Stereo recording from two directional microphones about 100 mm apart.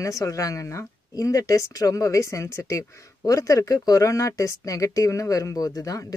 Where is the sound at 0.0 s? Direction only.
30° left (ahead or behind).